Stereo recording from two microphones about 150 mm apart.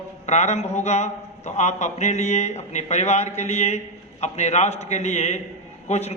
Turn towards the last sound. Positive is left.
turn(degrees=45)  # may be behind; listen again after turning